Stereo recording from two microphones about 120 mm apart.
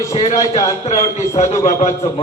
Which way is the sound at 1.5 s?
65° left (ahead or behind).